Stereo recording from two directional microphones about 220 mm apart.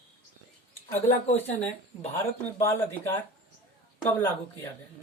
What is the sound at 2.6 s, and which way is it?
Speech, 10° left (ahead or behind).